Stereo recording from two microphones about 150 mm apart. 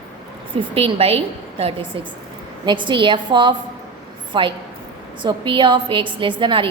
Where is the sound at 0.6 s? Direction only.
40° right (ahead or behind).